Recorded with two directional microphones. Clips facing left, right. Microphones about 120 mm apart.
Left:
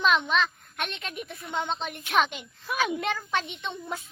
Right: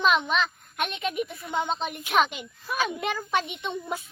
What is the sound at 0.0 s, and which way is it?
Speech, 5° right (ahead or behind).